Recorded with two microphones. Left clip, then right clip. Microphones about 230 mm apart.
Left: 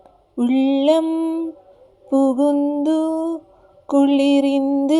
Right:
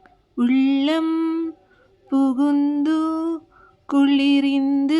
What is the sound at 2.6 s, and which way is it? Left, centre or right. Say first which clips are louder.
Music: left 2 dB; right.